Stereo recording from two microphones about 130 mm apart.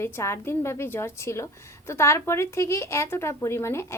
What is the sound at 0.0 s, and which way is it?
Speech, 20° left (ahead or behind).